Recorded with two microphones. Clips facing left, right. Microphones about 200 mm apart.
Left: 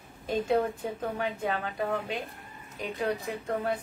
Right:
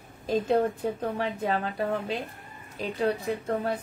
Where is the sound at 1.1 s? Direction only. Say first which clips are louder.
Right 3 dB; 35° right (ahead or behind).